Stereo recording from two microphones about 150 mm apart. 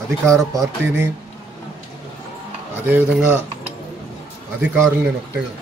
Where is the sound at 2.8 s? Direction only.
10° right (ahead or behind).